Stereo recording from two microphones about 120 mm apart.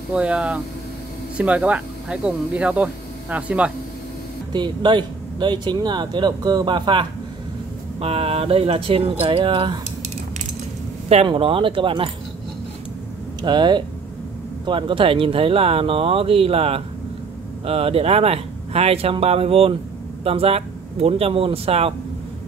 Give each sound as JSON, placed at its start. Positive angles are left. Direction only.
{"t": 0.1, "sound": "speech", "side_deg": -10}
{"t": 4.5, "sound": "speech", "side_deg": -40}
{"t": 8.0, "sound": "speech", "side_deg": -55}
{"t": 11.2, "sound": "speech", "side_deg": -50}
{"t": 13.4, "sound": "speech", "side_deg": -40}